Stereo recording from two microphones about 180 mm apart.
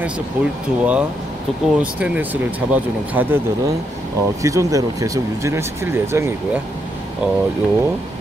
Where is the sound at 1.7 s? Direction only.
5° right (ahead or behind).